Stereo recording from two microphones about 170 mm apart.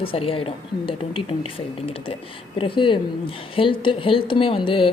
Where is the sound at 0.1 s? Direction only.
35° left (ahead or behind).